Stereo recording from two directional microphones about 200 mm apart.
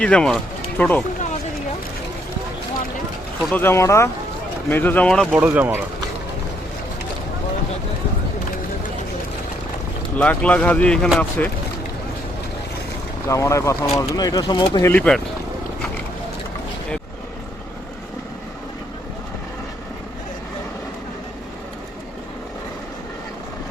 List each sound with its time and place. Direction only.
0.0 s speech: 5° left (ahead or behind)
3.5 s speech: 10° left (ahead or behind)
5.4 s speech: 10° right (ahead or behind)
10.2 s speech: 5° left (ahead or behind)
13.2 s speech: 15° left (ahead or behind)